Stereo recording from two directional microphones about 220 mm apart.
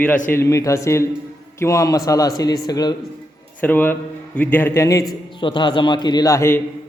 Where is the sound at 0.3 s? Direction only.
10° left (ahead or behind).